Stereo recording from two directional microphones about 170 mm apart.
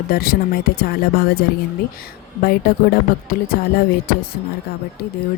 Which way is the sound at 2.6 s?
65° left (ahead or behind).